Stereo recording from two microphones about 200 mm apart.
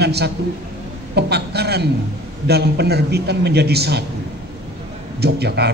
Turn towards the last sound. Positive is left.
turn(degrees=-55)  # may be behind; listen again after turning